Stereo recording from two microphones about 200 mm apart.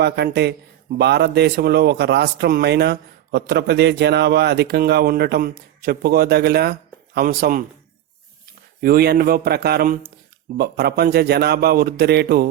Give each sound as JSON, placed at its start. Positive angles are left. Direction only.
{"t": 0.0, "sound": "speech", "side_deg": -55}
{"t": 8.8, "sound": "a man's voice", "side_deg": -50}